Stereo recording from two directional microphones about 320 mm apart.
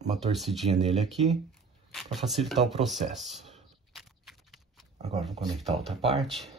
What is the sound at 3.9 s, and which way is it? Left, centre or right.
Horse, centre.